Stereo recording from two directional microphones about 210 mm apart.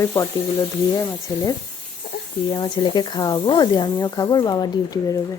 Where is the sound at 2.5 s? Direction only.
25° left (ahead or behind).